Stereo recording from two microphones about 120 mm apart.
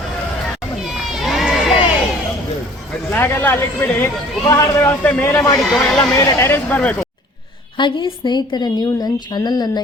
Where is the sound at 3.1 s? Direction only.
20° left (ahead or behind).